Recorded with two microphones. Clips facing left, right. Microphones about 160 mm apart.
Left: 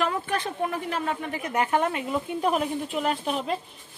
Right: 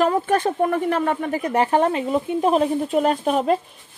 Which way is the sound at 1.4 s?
30° right (ahead or behind).